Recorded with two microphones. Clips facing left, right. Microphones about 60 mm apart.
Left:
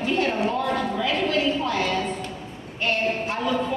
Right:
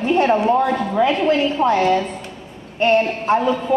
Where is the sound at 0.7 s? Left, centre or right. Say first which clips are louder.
Right 7 dB; right.